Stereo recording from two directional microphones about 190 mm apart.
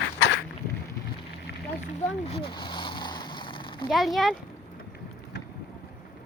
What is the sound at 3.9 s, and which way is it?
Speech, centre (ahead or behind).